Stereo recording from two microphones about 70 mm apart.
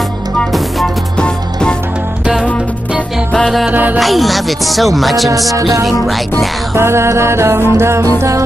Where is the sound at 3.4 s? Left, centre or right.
Centre.